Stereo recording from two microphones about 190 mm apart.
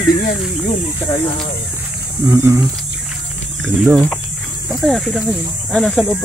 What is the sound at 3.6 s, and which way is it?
Speech, 10° right (ahead or behind).